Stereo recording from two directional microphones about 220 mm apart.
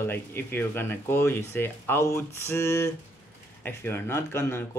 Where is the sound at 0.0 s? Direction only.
10° left (ahead or behind).